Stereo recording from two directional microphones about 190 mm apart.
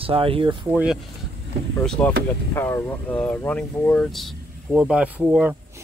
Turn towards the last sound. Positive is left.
turn(degrees=-10)  # may be behind; listen again after turning